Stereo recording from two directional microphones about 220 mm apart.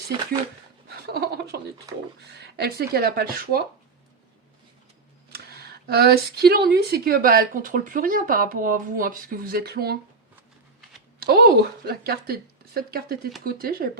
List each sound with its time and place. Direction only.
0.9 s a sound: 45° right (ahead or behind)
2.6 s speech: 45° right (ahead or behind)
5.5 s a woman's voice: 45° right (ahead or behind)
11.2 s a woman's voice: 45° right (ahead or behind)